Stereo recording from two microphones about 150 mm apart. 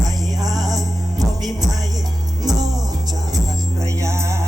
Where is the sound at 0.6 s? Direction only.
25° right (ahead or behind).